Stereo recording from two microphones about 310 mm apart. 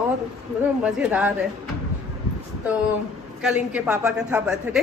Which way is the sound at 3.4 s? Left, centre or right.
Centre.